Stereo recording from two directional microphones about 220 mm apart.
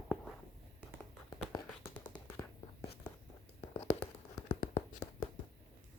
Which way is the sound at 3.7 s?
30° left (ahead or behind).